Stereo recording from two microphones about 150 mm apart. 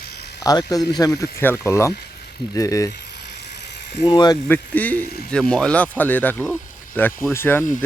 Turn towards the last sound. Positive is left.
turn(degrees=15)  # may be behind; listen again after turning